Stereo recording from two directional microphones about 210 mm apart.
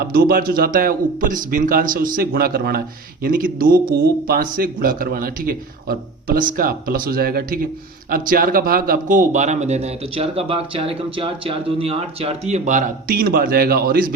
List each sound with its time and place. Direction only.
0.0 s a man's voice: 45° right (ahead or behind)